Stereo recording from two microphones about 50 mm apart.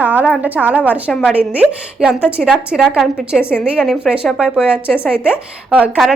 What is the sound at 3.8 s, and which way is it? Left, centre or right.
A woman's voice, centre.